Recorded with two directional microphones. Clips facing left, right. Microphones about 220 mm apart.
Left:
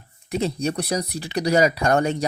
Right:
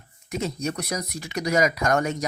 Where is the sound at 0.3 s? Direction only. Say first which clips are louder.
Left 4 dB; 30° left (ahead or behind).